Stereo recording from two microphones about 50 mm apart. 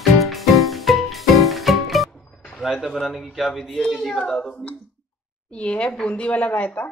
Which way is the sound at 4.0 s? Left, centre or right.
Centre.